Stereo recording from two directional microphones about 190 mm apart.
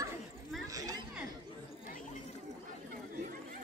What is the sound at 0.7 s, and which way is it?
Chatter, 20° right (ahead or behind).